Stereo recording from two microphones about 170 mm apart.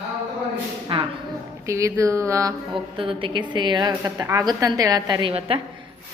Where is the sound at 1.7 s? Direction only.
15° right (ahead or behind).